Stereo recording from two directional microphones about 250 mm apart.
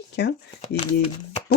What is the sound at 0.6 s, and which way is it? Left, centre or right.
Speech, left.